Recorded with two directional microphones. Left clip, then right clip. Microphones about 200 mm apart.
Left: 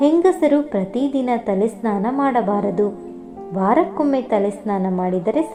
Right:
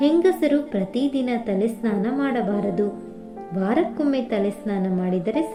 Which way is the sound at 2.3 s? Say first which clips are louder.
Left 5 dB; 35° left (ahead or behind).